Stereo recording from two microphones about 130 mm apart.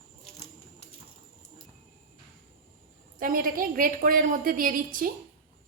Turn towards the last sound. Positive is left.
turn(degrees=-90)